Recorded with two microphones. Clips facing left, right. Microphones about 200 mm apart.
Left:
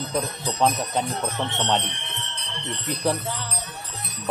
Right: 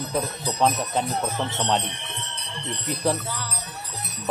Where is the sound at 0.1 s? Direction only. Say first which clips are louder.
Even; 5° right (ahead or behind).